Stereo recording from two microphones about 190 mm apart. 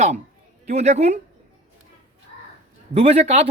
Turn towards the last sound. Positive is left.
turn(degrees=-35)  # may be behind; listen again after turning